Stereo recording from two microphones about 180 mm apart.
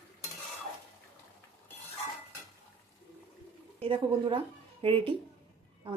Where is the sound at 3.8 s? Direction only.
30° right (ahead or behind).